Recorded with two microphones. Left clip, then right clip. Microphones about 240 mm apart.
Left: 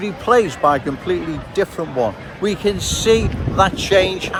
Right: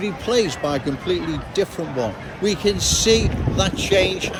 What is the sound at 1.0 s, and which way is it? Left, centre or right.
Speech, centre.